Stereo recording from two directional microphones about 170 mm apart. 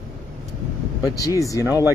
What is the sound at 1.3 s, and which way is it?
Speech, 20° left (ahead or behind).